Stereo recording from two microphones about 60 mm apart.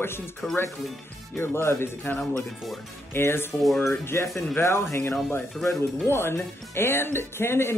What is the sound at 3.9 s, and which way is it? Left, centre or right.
Speech, left.